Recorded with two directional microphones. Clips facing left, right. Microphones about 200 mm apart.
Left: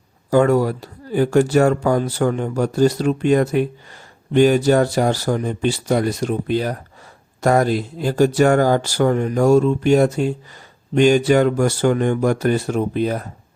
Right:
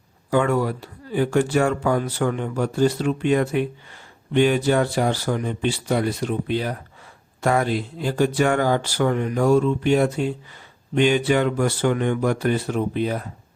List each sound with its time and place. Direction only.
0.3 s speech: 40° left (ahead or behind)